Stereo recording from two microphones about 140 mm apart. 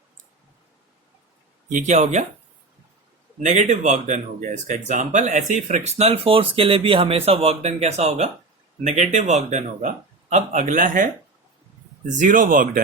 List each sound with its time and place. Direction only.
1.7 s a man's voice: 55° right (ahead or behind)
3.4 s a man's voice: 60° right (ahead or behind); by 12.8 s 75° right (ahead or behind)